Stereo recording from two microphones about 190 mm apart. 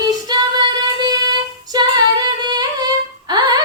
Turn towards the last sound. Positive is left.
turn(degrees=-20)  # may be behind; listen again after turning